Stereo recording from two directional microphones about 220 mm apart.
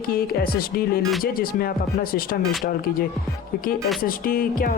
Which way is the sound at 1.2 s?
40° left (ahead or behind).